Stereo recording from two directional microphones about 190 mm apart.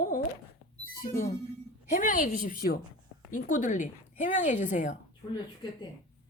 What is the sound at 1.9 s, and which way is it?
A woman's voice, 45° left (ahead or behind).